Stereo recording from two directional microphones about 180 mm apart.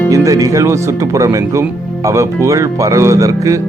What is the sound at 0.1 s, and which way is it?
Speech, 20° right (ahead or behind).